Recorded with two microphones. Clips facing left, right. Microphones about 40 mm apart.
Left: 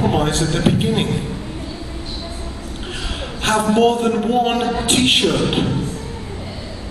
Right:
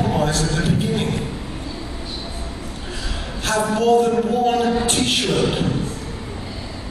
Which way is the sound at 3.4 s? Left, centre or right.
Left.